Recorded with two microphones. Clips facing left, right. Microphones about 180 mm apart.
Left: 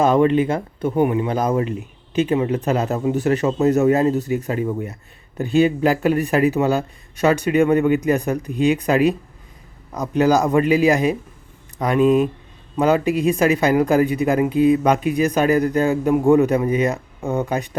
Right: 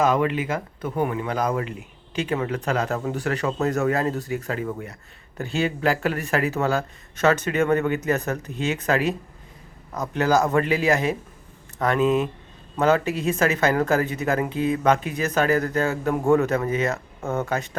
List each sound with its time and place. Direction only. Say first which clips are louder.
0.0 s a man's voice: left 6 dB; 30° left (ahead or behind)